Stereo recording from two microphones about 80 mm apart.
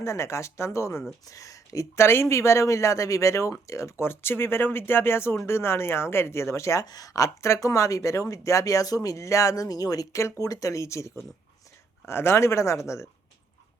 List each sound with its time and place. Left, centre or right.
0.0 s speech: left
6.8 s speech: left